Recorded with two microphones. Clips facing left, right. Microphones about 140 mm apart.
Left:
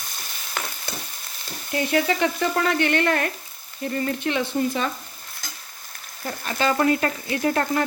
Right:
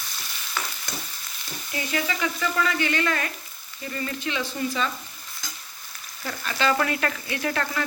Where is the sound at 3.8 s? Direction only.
50° left (ahead or behind).